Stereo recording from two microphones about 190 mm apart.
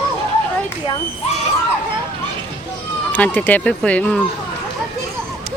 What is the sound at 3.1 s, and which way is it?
Speech, 10° left (ahead or behind).